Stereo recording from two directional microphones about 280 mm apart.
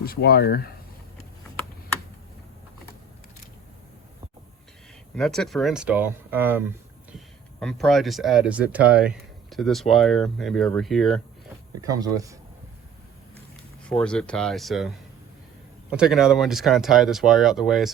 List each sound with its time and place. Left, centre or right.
0.0 s speech: left
5.1 s speech: centre
7.6 s speech: centre
11.8 s speech: centre
13.8 s speech: centre